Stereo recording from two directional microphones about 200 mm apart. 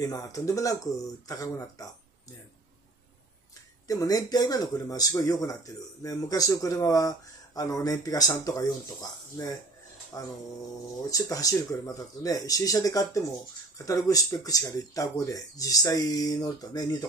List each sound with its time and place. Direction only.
0.0 s speech: 15° left (ahead or behind)
3.8 s speech: 15° left (ahead or behind)
10.1 s speech: 15° left (ahead or behind)